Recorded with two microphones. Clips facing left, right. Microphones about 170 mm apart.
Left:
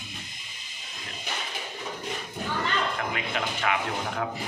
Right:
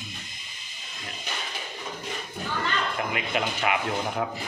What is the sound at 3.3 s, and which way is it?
Speech, 10° right (ahead or behind).